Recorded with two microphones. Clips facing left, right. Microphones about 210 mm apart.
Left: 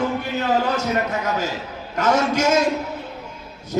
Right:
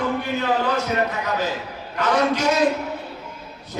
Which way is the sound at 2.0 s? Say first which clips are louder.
Left 1 dB; 45° left (ahead or behind).